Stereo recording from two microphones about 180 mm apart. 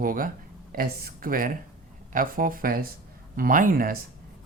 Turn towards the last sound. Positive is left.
turn(degrees=-50)  # may be behind; listen again after turning